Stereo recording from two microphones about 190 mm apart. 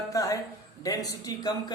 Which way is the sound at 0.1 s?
20° left (ahead or behind).